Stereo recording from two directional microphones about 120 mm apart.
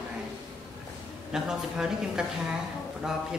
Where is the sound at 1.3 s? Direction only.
5° right (ahead or behind).